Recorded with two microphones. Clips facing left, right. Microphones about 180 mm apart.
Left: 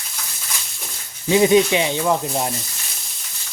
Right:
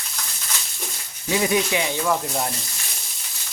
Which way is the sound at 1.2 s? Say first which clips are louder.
Left 7 dB; 25° left (ahead or behind).